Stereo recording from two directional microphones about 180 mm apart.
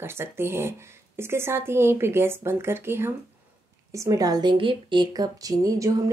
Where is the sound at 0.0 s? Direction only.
15° right (ahead or behind).